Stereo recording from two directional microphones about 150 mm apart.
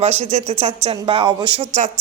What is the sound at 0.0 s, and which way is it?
Speech, 45° right (ahead or behind).